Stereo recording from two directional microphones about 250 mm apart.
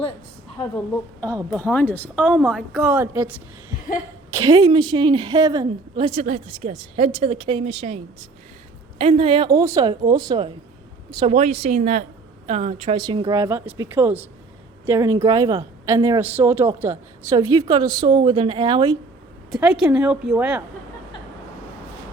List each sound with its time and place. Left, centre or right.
1.5 s a woman's voice: centre; by 7.9 s right
9.0 s a woman's voice: right
19.5 s a woman's voice: centre